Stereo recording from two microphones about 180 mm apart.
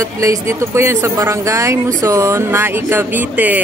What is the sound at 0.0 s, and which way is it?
Speech, 15° right (ahead or behind).